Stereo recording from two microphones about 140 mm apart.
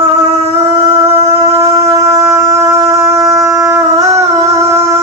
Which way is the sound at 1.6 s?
25° right (ahead or behind).